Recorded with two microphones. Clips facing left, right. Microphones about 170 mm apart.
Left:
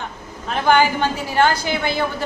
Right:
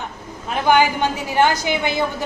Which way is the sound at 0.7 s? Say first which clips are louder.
Even; 15° right (ahead or behind).